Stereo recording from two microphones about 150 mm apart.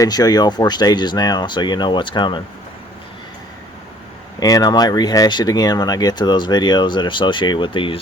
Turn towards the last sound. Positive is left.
turn(degrees=35)  # may be behind; listen again after turning